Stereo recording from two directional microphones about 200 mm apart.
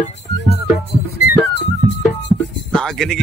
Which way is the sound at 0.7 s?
55° left (ahead or behind).